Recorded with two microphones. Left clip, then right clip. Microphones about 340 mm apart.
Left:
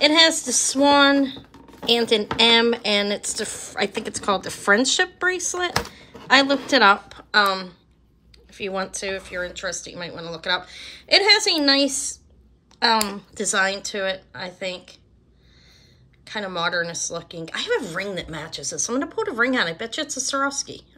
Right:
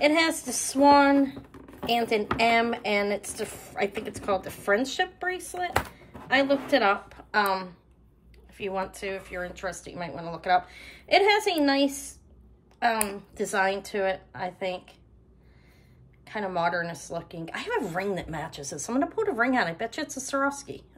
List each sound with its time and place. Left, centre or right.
0.0 s a woman's voice: centre
12.7 s a sound: centre
13.1 s a woman's voice: centre
16.3 s a woman's voice: centre